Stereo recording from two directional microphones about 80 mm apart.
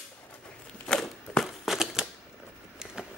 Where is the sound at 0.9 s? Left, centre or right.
Centre.